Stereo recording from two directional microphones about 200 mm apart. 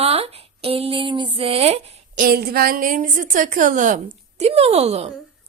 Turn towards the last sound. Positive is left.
turn(degrees=-30)  # may be behind; listen again after turning